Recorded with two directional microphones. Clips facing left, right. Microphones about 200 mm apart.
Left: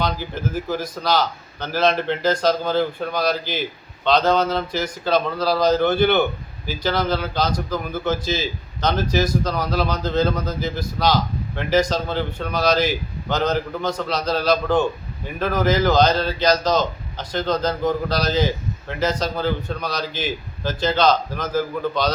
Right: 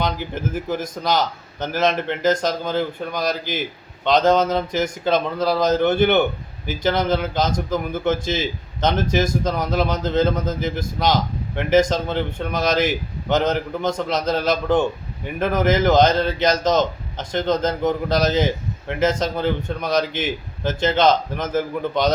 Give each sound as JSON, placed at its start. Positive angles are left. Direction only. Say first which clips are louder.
{"t": 0.7, "sound": "a man's voice", "louder": "even", "side_deg": -20}